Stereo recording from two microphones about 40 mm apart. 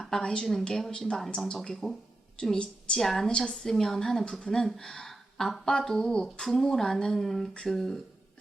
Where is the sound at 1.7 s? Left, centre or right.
Centre.